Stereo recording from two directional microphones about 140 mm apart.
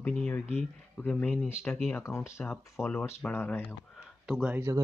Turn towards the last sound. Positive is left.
turn(degrees=-5)  # may be behind; listen again after turning